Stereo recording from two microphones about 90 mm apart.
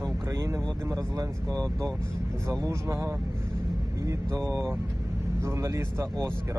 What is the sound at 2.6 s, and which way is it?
Speech, 30° right (ahead or behind).